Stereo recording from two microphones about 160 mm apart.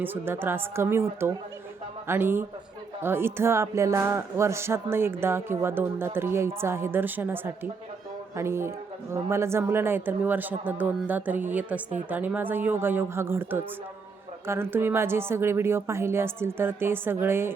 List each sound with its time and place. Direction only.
0.0 s speech: 15° right (ahead or behind)
2.0 s speech: 15° right (ahead or behind)